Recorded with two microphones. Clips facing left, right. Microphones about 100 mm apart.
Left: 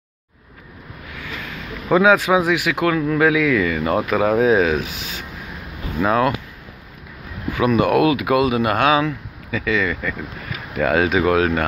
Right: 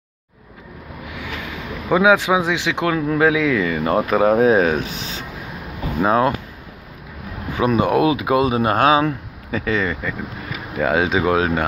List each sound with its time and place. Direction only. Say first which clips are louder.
1.1 s speech: right 2 dB; 15° right (ahead or behind)
7.5 s speech: left 1 dB; 30° right (ahead or behind)
10.8 s speech: left 1 dB; 20° right (ahead or behind)